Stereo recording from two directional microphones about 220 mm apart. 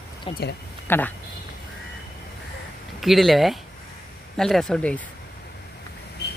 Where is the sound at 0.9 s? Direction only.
10° left (ahead or behind).